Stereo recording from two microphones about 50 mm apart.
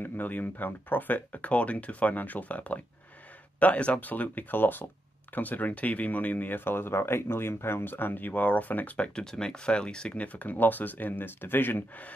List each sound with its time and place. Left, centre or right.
0.0 s speech: left
9.2 s speech: centre; by 11.8 s left